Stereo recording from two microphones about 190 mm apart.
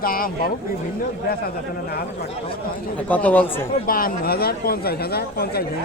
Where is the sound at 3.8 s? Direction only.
50° left (ahead or behind).